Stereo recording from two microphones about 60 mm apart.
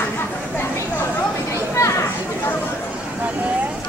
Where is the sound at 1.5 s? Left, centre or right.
Left.